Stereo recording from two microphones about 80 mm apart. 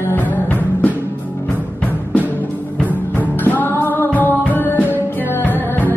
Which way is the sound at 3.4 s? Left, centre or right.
Left.